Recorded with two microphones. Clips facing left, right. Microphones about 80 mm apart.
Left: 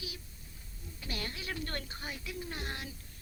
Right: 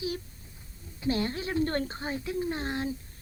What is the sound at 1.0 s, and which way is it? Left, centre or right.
A woman's voice, right.